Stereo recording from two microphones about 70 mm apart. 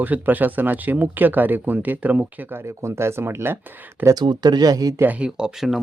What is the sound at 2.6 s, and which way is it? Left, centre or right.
Speech, right.